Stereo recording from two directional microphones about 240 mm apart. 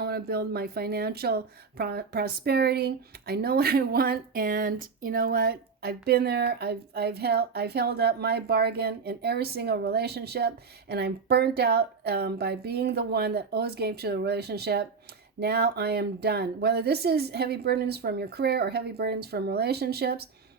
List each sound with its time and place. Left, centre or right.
0.0 s speech: right